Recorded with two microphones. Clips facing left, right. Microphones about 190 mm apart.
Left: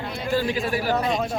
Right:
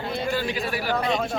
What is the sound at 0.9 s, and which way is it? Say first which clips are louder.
Speech: left 1 dB; centre (ahead or behind).